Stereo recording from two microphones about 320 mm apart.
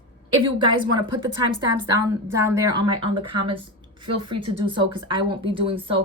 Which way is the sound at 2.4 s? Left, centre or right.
Centre.